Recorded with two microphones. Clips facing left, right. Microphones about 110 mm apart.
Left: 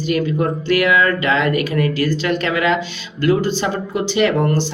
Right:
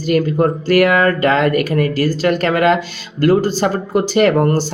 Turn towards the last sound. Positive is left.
turn(degrees=-45)  # may be behind; listen again after turning